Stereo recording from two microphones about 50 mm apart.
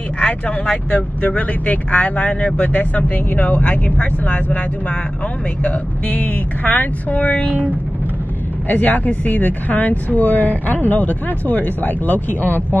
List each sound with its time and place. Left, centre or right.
0.2 s speech: left
8.6 s speech: left